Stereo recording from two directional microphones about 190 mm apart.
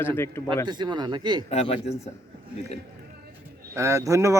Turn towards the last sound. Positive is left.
turn(degrees=-15)  # may be behind; listen again after turning